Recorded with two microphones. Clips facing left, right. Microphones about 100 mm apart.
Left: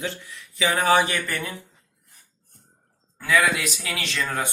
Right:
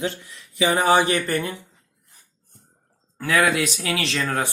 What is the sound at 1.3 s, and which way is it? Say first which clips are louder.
Speech: right 6 dB; 45° right (ahead or behind).